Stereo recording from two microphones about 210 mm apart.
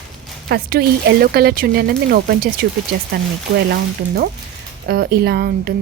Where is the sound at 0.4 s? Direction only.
45° right (ahead or behind).